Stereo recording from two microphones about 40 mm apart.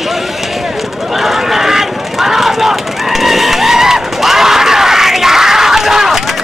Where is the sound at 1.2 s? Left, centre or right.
Centre.